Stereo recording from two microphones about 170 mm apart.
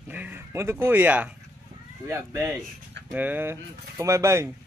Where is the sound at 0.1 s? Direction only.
10° right (ahead or behind).